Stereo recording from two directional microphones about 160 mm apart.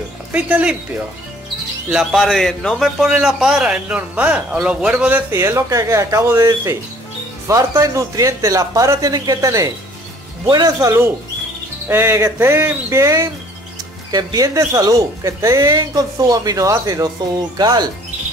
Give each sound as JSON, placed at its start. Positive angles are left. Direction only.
{"t": 0.3, "sound": "a man's voice", "side_deg": -10}
{"t": 1.9, "sound": "a man's voice", "side_deg": 0}